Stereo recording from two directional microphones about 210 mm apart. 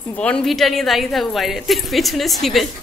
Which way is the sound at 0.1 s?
5° left (ahead or behind).